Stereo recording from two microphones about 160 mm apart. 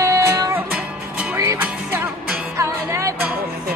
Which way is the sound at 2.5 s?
20° right (ahead or behind).